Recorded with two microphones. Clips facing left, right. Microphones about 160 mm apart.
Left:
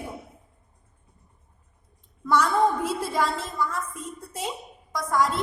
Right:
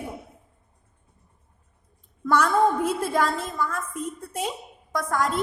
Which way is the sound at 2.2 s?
55° right (ahead or behind).